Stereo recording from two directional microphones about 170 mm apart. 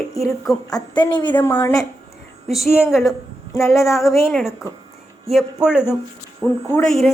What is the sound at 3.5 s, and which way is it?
Speech, 15° left (ahead or behind).